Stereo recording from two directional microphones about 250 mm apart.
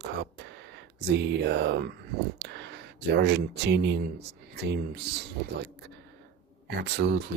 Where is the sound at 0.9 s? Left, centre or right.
Right.